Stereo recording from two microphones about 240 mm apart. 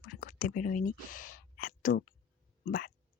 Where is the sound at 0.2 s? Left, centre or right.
Left.